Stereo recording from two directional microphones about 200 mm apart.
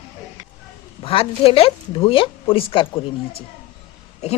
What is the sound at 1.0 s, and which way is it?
A woman's voice, 30° left (ahead or behind).